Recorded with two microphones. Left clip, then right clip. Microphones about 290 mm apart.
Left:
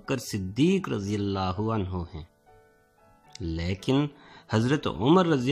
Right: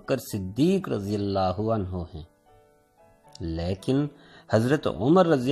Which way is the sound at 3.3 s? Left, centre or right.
Centre.